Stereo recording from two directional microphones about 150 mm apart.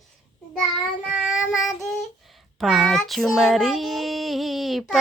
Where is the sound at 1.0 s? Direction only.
5° right (ahead or behind).